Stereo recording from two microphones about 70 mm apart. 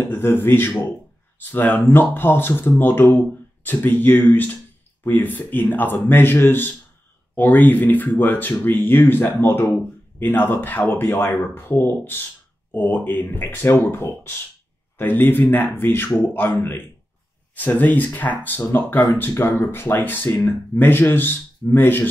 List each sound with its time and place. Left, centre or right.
0.0 s speech: left